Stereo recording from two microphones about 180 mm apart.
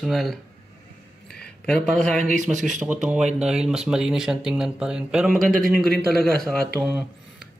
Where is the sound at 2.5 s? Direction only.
45° right (ahead or behind).